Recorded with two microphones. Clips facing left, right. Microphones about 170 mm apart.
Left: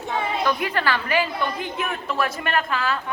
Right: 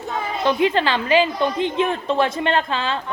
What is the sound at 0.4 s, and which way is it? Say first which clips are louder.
A woman's voice: right 8 dB; 25° right (ahead or behind).